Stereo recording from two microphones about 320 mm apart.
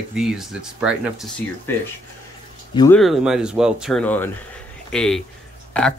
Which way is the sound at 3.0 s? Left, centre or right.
Centre.